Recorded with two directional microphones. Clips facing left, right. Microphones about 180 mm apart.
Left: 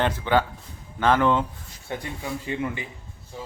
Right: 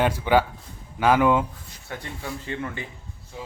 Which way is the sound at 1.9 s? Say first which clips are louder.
Left 3 dB; 20° left (ahead or behind).